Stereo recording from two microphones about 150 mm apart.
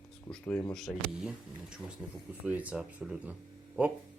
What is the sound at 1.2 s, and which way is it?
Speech, 5° right (ahead or behind).